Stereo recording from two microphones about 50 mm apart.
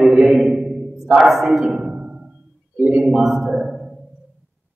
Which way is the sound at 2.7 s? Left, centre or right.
Right.